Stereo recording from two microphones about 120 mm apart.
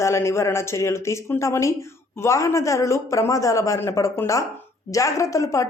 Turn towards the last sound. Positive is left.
turn(degrees=25)  # may be behind; listen again after turning